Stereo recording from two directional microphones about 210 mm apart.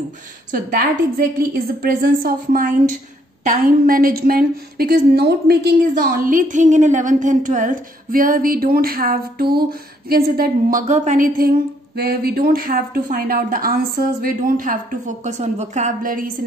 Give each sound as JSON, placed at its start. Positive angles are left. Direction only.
{"t": 0.5, "sound": "a woman's voice", "side_deg": -40}